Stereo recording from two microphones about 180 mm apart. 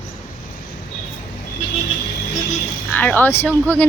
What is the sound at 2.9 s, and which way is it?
Speech, 10° left (ahead or behind).